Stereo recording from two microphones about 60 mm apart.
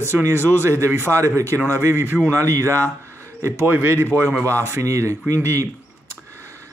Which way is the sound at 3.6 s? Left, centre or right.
Right.